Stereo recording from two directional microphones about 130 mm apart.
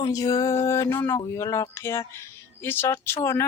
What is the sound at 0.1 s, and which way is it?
Speech, 30° left (ahead or behind).